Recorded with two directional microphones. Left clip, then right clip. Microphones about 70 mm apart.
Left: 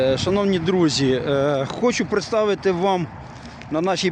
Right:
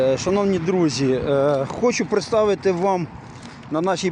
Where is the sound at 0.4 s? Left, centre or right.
Left.